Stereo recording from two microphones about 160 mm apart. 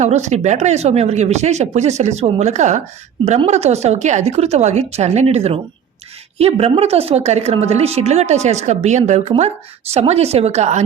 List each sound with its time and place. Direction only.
0.0 s a woman's voice: 45° right (ahead or behind)